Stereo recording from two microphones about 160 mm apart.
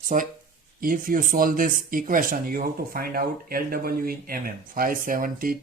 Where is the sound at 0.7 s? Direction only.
60° right (ahead or behind).